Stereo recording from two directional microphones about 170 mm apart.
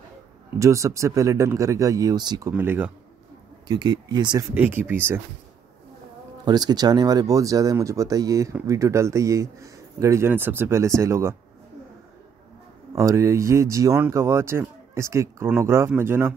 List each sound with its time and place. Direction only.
0.6 s speech: 20° right (ahead or behind)
2.5 s speech: 10° right (ahead or behind)
3.6 s speech: 25° right (ahead or behind)
4.6 s speech: 10° right (ahead or behind)
6.4 s speech: 25° right (ahead or behind)
12.9 s speech: 15° right (ahead or behind)